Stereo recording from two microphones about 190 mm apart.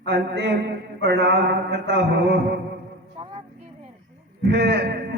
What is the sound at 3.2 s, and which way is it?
Vehicle, 35° right (ahead or behind).